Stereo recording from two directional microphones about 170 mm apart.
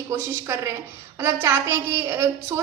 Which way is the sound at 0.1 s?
20° right (ahead or behind).